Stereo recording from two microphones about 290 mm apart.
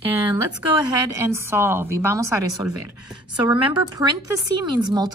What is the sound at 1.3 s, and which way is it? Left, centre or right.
A woman's voice, centre.